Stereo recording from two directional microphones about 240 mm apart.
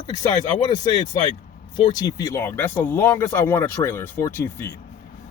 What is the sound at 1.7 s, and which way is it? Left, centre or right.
Speech, centre.